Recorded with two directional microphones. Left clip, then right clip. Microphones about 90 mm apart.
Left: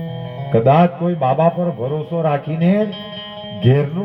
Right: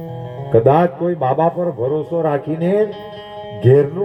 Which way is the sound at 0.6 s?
50° right (ahead or behind).